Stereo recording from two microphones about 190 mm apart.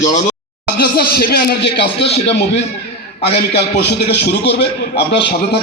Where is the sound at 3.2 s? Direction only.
60° left (ahead or behind).